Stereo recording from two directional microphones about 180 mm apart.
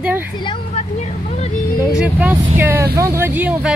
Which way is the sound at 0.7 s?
40° left (ahead or behind).